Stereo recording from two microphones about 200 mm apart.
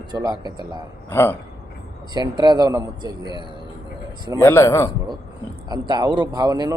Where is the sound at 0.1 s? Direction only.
20° right (ahead or behind).